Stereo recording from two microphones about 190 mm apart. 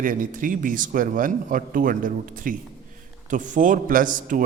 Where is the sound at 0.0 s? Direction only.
45° right (ahead or behind).